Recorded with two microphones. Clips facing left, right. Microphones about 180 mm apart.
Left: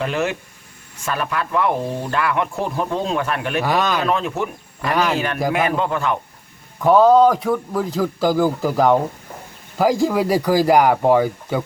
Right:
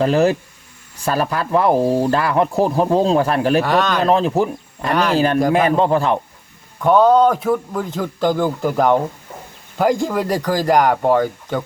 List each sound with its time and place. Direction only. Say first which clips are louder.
0.0 s speech: right 7 dB; 35° right (ahead or behind)
3.6 s a man's voice: right 2 dB; 5° left (ahead or behind)
4.0 s speech: right 5 dB; 35° right (ahead or behind)
6.7 s a man's voice: even; centre (ahead or behind)